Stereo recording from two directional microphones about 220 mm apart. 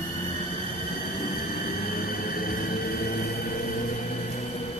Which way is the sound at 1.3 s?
40° left (ahead or behind).